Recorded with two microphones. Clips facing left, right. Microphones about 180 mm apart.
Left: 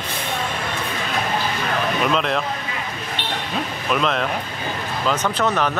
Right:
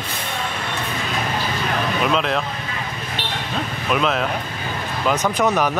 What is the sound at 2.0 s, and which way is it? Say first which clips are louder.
Speech: right 1 dB; centre (ahead or behind).